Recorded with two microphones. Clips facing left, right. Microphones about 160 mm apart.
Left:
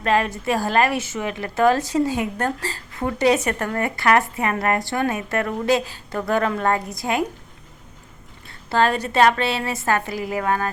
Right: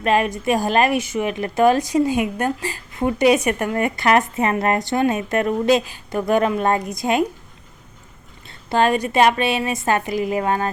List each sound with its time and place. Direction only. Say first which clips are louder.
0.0 s a woman's voice: right 2 dB; 15° right (ahead or behind)
8.4 s a woman's voice: right 2 dB; 15° right (ahead or behind)